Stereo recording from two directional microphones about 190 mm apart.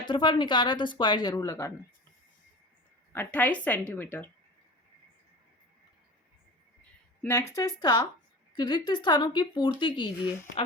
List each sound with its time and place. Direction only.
0.1 s speech: 25° left (ahead or behind)
3.1 s speech: 10° left (ahead or behind)
7.2 s speech: 15° left (ahead or behind)